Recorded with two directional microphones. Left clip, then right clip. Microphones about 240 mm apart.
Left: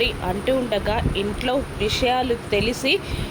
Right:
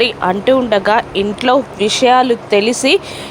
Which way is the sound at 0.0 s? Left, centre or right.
Right.